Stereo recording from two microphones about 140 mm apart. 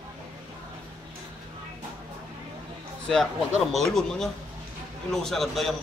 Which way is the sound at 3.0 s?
5° left (ahead or behind).